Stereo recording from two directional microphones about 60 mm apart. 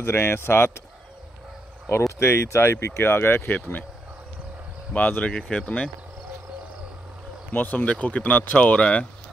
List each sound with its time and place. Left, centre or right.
0.0 s speech: left
2.1 s speech: left
4.9 s speech: left
7.5 s speech: left